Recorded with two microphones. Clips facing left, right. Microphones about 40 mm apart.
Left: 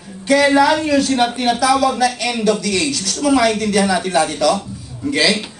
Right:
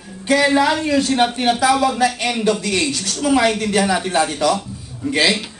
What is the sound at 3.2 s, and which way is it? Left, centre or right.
A man's voice, right.